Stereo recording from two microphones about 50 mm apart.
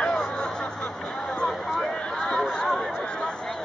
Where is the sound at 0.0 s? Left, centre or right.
Centre.